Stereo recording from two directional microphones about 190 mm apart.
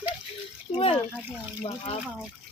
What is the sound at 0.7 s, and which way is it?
Speech, 30° left (ahead or behind).